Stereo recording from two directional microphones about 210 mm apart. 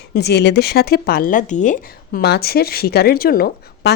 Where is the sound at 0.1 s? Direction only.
50° left (ahead or behind).